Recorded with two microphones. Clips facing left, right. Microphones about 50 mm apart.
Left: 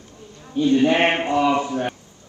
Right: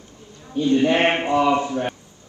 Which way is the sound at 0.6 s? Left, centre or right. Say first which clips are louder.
Left 1 dB; left.